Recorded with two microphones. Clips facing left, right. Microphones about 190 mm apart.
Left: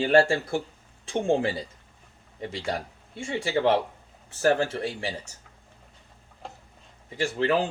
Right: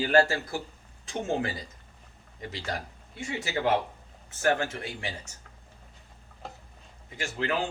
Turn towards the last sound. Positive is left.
turn(degrees=35)  # may be behind; listen again after turning